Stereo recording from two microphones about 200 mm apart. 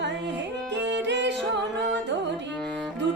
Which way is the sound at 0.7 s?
60° right (ahead or behind).